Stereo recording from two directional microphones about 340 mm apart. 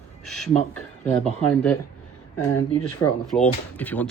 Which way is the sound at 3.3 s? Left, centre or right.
Centre.